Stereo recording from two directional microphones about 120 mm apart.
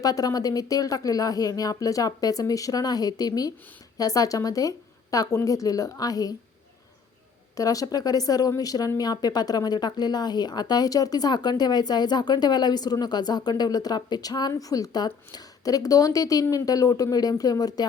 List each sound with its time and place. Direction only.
0.0 s a woman's voice: 30° left (ahead or behind)
7.5 s speech: 30° left (ahead or behind)